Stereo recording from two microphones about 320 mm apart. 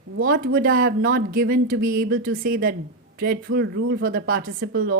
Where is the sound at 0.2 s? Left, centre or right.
Right.